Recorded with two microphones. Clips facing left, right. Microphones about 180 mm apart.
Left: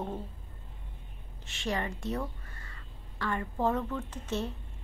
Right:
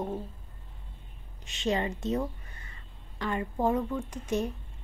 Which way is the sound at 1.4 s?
20° right (ahead or behind).